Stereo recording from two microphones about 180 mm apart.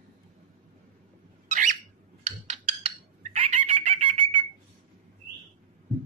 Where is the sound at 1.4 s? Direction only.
45° right (ahead or behind).